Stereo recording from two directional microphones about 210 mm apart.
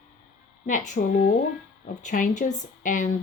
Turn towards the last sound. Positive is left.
turn(degrees=35)  # may be behind; listen again after turning